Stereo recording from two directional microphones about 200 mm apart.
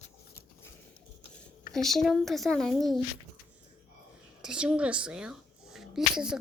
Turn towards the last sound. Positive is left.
turn(degrees=-5)  # may be behind; listen again after turning